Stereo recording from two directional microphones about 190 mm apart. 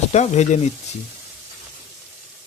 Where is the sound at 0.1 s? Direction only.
35° left (ahead or behind).